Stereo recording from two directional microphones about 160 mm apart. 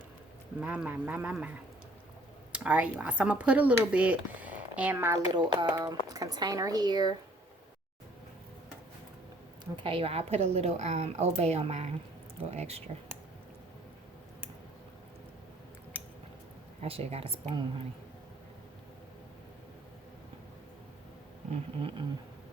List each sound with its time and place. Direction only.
0.6 s speech: 10° right (ahead or behind)
2.5 s speech: 10° right (ahead or behind)
5.3 s speech: 25° right (ahead or behind)
9.7 s a woman's voice: 35° right (ahead or behind)
16.8 s a woman's voice: 40° right (ahead or behind)
21.5 s a woman's voice: 35° right (ahead or behind)